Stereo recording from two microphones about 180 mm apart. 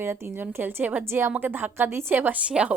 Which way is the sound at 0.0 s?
15° right (ahead or behind).